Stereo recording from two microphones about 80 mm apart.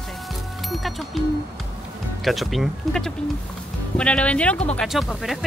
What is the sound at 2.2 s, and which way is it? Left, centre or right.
Speech, centre.